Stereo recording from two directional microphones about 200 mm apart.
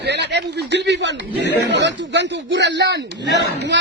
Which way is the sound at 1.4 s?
60° left (ahead or behind).